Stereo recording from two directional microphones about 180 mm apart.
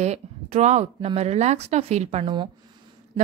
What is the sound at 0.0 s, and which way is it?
A woman's voice, 40° right (ahead or behind).